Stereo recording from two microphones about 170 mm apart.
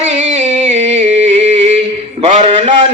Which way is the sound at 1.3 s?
35° right (ahead or behind).